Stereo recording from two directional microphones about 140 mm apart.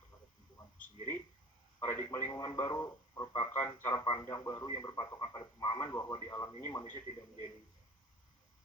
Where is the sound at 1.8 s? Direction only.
20° left (ahead or behind).